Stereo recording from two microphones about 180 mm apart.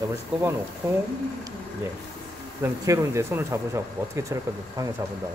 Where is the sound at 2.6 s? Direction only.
15° right (ahead or behind).